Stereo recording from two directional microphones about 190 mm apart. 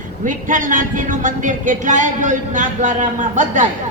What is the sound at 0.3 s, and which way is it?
A woman's voice, 45° right (ahead or behind).